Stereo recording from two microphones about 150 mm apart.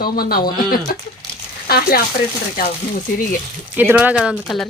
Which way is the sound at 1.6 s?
90° left.